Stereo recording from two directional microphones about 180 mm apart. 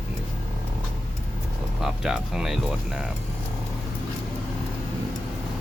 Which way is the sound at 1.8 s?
Centre (ahead or behind).